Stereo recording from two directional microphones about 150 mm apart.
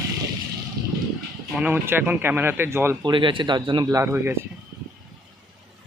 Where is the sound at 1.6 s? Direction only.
15° right (ahead or behind).